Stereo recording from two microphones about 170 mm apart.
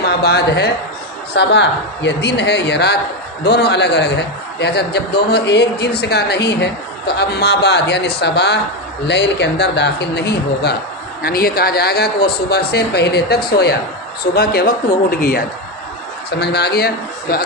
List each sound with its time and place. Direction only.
0.0 s speech: 70° left (ahead or behind)
1.3 s a man's voice: 90° left
9.0 s speech: 90° left
11.2 s a man's voice: 60° left (ahead or behind)
16.3 s a man's voice: 75° left (ahead or behind)